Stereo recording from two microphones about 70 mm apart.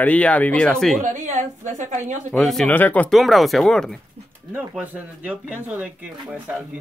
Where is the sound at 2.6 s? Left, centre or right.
Left.